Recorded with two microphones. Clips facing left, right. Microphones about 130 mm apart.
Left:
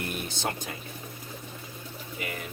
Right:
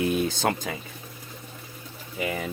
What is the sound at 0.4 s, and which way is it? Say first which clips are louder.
Speech: right 5 dB; 90° right.